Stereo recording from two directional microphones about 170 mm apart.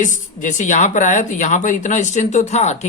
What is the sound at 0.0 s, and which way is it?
A woman's voice, 50° left (ahead or behind).